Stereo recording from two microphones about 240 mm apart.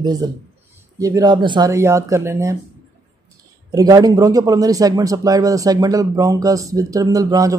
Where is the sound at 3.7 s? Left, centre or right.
Centre.